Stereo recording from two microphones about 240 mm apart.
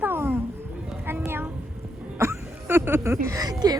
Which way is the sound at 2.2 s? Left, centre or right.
Centre.